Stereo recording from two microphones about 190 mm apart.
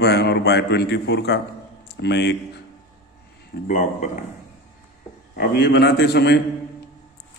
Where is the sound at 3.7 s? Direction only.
45° left (ahead or behind).